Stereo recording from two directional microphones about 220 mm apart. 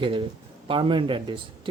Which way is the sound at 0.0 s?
25° right (ahead or behind).